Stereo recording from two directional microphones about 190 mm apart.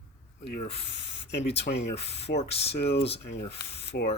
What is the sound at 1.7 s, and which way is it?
Speech, 55° left (ahead or behind).